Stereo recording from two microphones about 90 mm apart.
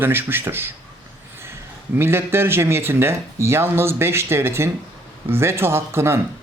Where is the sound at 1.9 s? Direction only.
25° right (ahead or behind).